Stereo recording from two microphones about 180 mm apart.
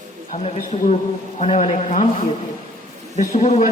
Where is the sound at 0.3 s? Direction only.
40° left (ahead or behind).